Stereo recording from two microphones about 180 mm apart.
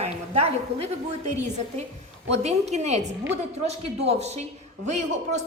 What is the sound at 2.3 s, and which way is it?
A man's voice, 40° right (ahead or behind).